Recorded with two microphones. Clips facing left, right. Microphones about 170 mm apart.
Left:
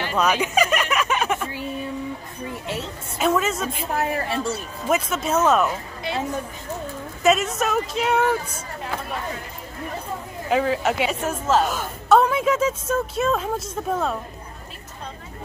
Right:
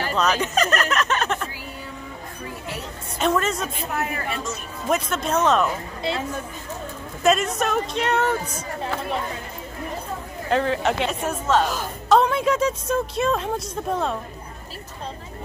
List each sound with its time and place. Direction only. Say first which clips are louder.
0.1 s a sound: left 2 dB; 10° left (ahead or behind)
3.2 s a woman's voice: left 1 dB; 5° left (ahead or behind)
3.9 s a woman's voice: left 5 dB; 30° left (ahead or behind)
4.8 s a woman's voice: left 1 dB; 5° left (ahead or behind)
7.2 s a woman's voice: even; 5° left (ahead or behind)
10.5 s a woman's voice: even; 5° left (ahead or behind)